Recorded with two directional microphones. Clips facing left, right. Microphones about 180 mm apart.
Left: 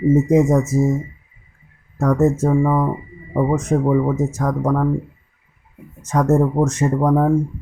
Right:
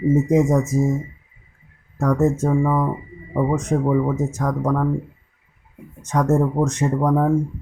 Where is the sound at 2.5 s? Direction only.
15° left (ahead or behind).